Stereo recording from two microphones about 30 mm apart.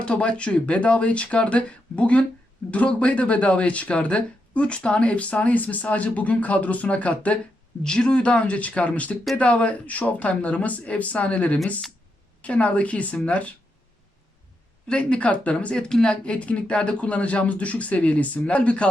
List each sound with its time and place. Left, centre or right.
0.0 s speech: left
5.5 s speech: left
8.0 s speech: left
14.8 s speech: left
15.2 s speech: left
15.7 s speech: centre
16.0 s speech: left